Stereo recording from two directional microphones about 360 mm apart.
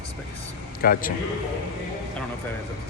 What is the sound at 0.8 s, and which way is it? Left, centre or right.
Speech, left.